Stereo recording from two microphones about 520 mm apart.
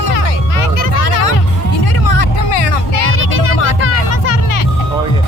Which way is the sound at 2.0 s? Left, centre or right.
Left.